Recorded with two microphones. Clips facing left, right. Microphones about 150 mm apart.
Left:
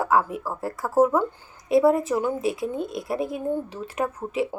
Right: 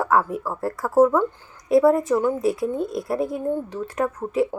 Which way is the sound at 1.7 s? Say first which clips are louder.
Right 2 dB; 25° left (ahead or behind).